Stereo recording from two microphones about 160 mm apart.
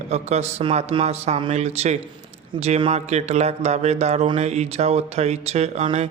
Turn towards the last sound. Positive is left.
turn(degrees=-45)  # may be behind; listen again after turning